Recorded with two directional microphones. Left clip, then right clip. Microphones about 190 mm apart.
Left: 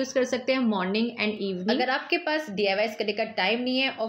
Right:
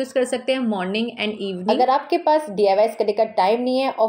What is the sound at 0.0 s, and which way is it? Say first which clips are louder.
A woman's voice: right 4 dB; 20° right (ahead or behind).